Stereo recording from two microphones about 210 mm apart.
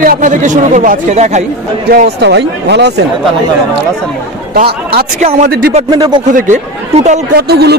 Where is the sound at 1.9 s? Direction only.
50° right (ahead or behind).